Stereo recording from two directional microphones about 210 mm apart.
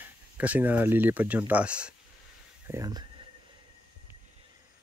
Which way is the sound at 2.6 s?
15° right (ahead or behind).